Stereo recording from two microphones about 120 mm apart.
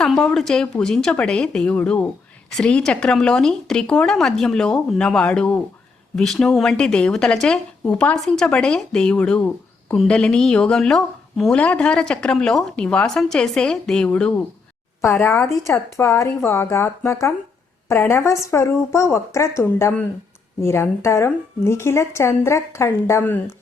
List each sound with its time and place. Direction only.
0.0 s a woman's voice: 5° left (ahead or behind)
15.0 s a woman's voice: 20° left (ahead or behind)